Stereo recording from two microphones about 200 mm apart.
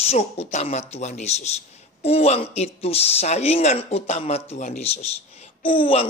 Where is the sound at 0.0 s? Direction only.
30° left (ahead or behind).